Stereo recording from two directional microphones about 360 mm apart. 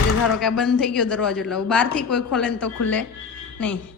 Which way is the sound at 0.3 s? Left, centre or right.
Centre.